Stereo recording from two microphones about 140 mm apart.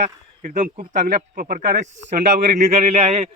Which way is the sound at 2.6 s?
55° right (ahead or behind).